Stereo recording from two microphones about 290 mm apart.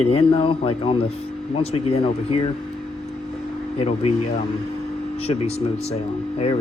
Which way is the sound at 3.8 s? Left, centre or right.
Left.